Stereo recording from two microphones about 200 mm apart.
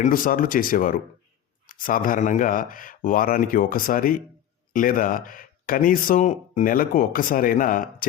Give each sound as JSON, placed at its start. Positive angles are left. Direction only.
{"t": 0.0, "sound": "speech", "side_deg": 45}